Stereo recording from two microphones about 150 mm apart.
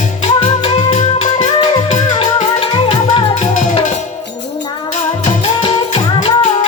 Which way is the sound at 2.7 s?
35° left (ahead or behind).